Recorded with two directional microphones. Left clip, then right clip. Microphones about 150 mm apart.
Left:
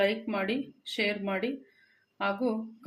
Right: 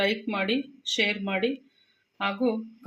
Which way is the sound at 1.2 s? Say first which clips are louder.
Right 4 dB; 40° right (ahead or behind).